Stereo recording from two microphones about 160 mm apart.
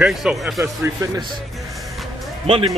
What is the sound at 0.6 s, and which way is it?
Speech, 15° right (ahead or behind).